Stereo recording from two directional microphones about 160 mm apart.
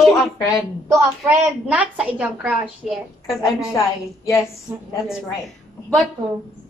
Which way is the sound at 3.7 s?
20° left (ahead or behind).